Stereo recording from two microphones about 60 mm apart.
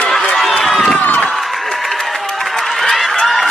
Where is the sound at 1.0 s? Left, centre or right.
Left.